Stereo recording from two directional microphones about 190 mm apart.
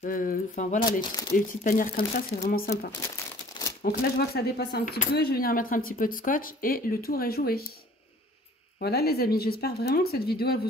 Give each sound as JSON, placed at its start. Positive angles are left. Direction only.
{"t": 0.0, "sound": "speech", "side_deg": 45}
{"t": 8.7, "sound": "speech", "side_deg": 55}